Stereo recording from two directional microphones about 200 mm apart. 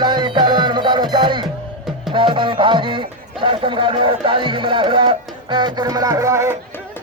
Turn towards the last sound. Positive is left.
turn(degrees=-15)  # may be behind; listen again after turning